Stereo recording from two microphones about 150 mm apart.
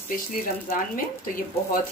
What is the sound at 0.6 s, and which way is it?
Speech, 65° left (ahead or behind).